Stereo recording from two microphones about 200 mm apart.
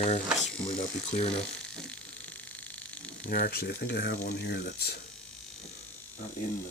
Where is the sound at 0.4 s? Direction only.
30° left (ahead or behind).